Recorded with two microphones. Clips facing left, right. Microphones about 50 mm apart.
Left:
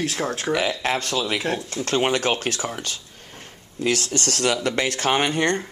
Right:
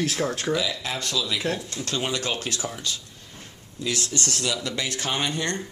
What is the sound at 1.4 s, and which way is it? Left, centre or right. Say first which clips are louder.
Speech: left 2 dB; centre.